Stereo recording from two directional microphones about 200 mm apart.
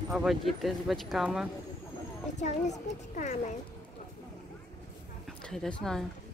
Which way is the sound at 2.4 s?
40° left (ahead or behind).